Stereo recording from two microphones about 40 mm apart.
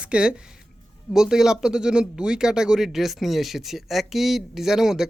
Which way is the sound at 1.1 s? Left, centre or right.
Centre.